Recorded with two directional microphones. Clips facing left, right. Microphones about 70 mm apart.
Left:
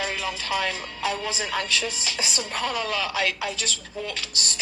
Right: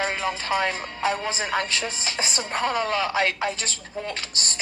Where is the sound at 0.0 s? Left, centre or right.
Right.